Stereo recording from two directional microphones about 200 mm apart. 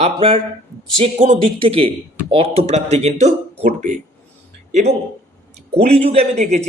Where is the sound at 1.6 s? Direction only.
30° right (ahead or behind).